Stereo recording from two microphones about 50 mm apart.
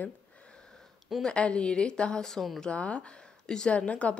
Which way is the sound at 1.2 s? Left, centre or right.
Left.